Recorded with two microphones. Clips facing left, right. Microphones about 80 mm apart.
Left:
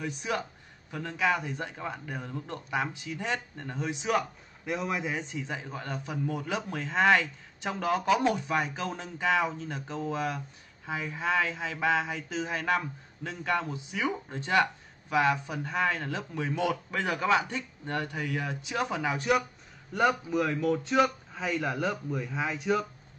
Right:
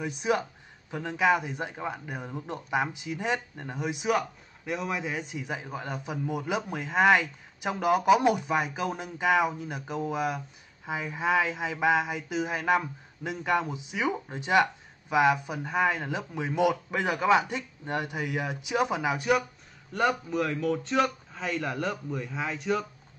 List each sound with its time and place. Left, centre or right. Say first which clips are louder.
0.0 s a man's voice: right 5 dB; centre
4.1 s a man's voice: right 1 dB; centre